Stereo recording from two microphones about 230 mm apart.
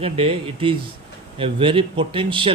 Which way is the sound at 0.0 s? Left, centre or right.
Right.